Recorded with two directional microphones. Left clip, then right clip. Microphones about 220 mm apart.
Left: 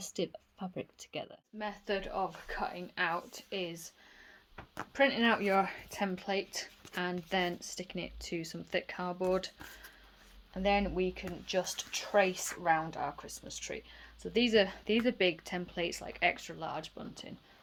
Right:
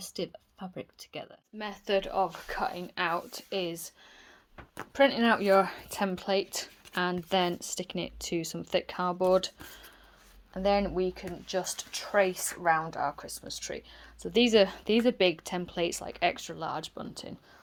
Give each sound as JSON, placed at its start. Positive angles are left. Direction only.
{"t": 0.0, "sound": "speech", "side_deg": 0}
{"t": 1.5, "sound": "speech", "side_deg": -40}
{"t": 4.9, "sound": "speech", "side_deg": -25}
{"t": 10.5, "sound": "speech", "side_deg": -25}